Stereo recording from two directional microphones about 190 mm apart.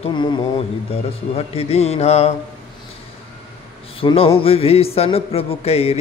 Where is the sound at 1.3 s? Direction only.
30° left (ahead or behind).